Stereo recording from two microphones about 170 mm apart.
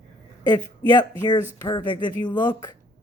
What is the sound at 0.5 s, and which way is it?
Speech, 25° left (ahead or behind).